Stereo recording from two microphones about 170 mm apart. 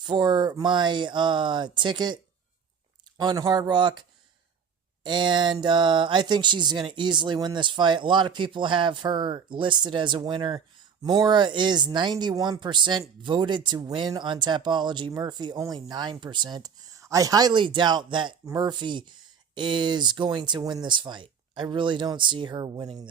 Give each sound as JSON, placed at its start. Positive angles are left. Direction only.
{"t": 0.0, "sound": "speech", "side_deg": -25}
{"t": 3.2, "sound": "speech", "side_deg": -25}
{"t": 5.0, "sound": "speech", "side_deg": -25}